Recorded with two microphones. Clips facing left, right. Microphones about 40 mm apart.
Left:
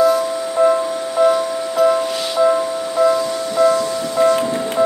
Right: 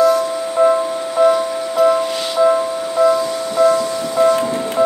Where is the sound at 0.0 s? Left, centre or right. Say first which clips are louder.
Right 1 dB; centre.